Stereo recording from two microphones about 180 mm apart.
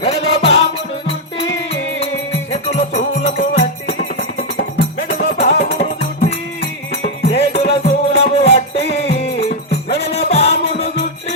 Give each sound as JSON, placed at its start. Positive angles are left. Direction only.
{"t": 0.0, "sound": "music", "side_deg": 35}
{"t": 2.7, "sound": "music", "side_deg": 35}
{"t": 4.5, "sound": "music", "side_deg": 55}
{"t": 5.4, "sound": "music", "side_deg": 35}